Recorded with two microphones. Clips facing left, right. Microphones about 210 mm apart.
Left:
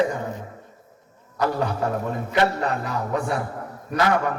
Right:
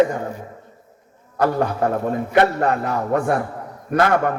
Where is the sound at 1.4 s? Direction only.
55° right (ahead or behind).